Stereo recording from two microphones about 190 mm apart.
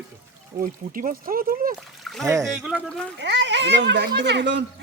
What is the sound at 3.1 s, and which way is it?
Speech, 65° right (ahead or behind).